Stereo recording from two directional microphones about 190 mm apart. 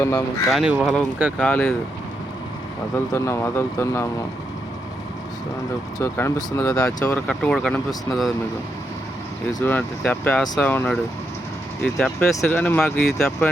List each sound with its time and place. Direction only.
0.0 s speech: 15° left (ahead or behind)
0.5 s speech: 5° right (ahead or behind)
2.9 s speech: 15° left (ahead or behind)
6.0 s speech: 15° left (ahead or behind)
6.8 s speech: 5° left (ahead or behind)
9.5 s speech: 20° left (ahead or behind)
9.7 s speech: 5° left (ahead or behind)